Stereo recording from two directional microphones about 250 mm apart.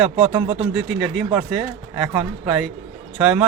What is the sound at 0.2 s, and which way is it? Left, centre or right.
Speech, right.